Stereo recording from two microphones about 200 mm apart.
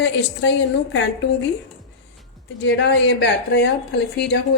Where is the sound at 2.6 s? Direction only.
60° left (ahead or behind).